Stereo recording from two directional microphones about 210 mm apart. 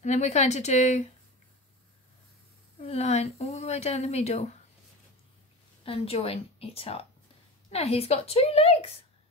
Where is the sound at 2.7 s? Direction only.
30° left (ahead or behind).